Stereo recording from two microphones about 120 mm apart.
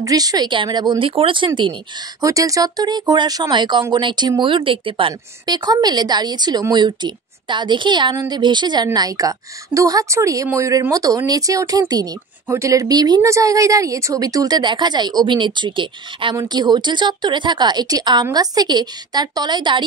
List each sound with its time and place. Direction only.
0.0 s speech: 30° right (ahead or behind)
2.2 s speech: 30° right (ahead or behind); by 5.6 s 45° right (ahead or behind)
5.7 s speech: 35° right (ahead or behind)